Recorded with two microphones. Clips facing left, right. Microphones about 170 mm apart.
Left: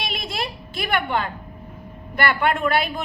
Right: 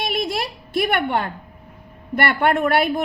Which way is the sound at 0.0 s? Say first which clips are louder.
Right 5 dB; 55° right (ahead or behind).